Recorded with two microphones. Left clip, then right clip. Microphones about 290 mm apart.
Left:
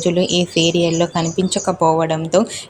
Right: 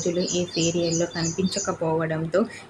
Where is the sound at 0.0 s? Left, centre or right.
Left.